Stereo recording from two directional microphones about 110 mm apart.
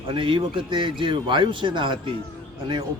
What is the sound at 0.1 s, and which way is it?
Speech, 50° right (ahead or behind).